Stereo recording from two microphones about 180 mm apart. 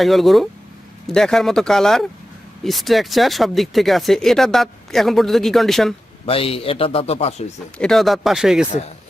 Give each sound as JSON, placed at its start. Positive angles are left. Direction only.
{"t": 0.0, "sound": "speech", "side_deg": 0}
{"t": 6.2, "sound": "a man's voice", "side_deg": 30}
{"t": 7.8, "sound": "speech", "side_deg": 0}